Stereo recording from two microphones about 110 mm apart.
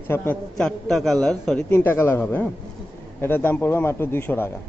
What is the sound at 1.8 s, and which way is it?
A man's voice, 20° left (ahead or behind).